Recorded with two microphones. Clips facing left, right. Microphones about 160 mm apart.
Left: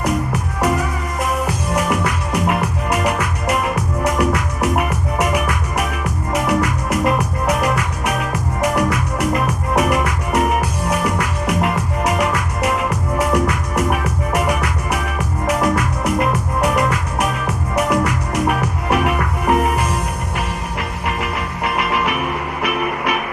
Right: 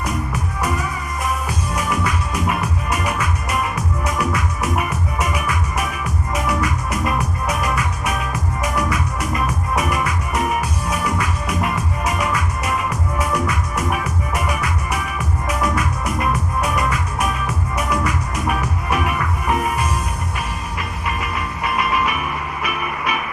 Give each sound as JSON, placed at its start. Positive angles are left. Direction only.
{"t": 0.0, "sound": "music", "side_deg": 75}
{"t": 21.2, "sound": "music", "side_deg": 75}